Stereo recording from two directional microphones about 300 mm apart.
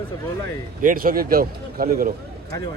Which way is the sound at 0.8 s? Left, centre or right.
Right.